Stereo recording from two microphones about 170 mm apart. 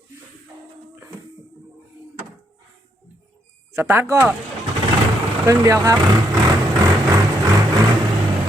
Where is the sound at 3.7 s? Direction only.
15° right (ahead or behind).